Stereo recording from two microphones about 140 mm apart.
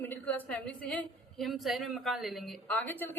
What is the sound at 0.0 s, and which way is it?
A woman's voice, 15° left (ahead or behind).